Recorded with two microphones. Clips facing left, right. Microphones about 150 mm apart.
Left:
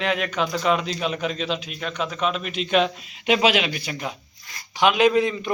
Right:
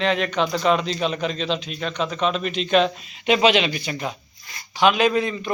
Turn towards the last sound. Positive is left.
turn(degrees=15)  # may be behind; listen again after turning